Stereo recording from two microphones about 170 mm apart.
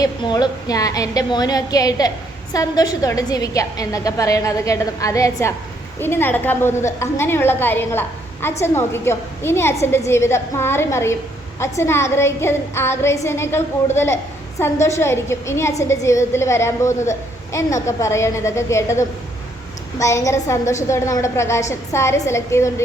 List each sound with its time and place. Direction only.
0.0 s a woman's voice: 25° left (ahead or behind)